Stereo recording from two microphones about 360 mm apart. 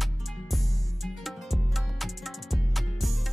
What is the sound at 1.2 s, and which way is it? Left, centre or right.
Music, centre.